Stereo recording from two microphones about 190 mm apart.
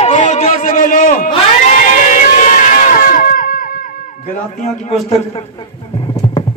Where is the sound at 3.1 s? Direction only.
50° left (ahead or behind).